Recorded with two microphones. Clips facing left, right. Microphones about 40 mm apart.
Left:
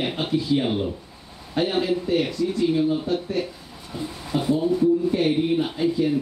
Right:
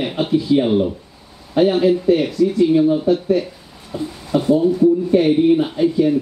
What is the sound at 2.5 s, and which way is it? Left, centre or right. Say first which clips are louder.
Speech: right 6 dB; right.